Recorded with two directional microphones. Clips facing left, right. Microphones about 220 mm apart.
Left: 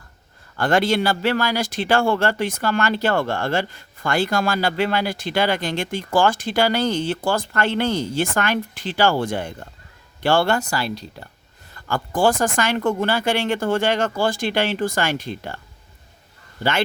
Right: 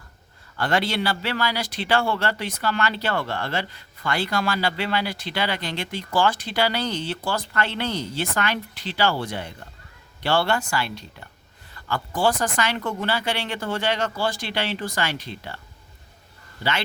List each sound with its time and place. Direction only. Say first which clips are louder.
0.5 s speech: left 5 dB; 50° left (ahead or behind)